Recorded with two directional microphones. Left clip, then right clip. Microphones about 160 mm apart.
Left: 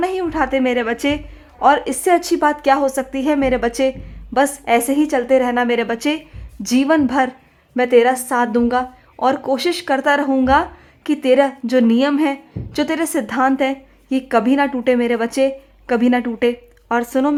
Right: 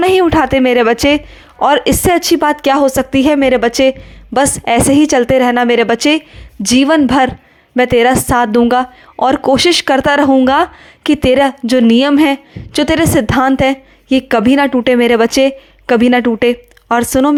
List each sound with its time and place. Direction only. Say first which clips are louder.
0.0 s speech: right 9 dB; 40° right (ahead or behind)